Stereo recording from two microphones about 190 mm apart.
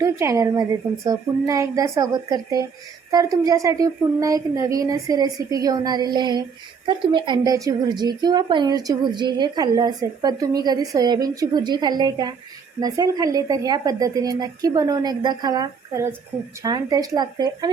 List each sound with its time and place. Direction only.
0.0 s a woman's voice: 15° right (ahead or behind)